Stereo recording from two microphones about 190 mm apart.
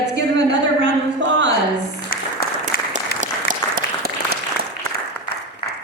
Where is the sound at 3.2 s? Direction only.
45° right (ahead or behind).